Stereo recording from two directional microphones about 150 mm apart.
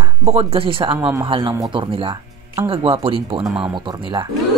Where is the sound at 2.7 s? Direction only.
40° right (ahead or behind).